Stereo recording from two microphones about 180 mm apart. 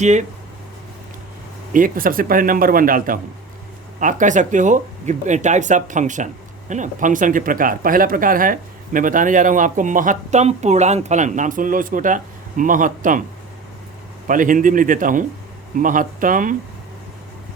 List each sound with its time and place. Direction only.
0.0 s speech: 40° right (ahead or behind)
1.7 s speech: 50° right (ahead or behind)
14.3 s speech: 50° right (ahead or behind)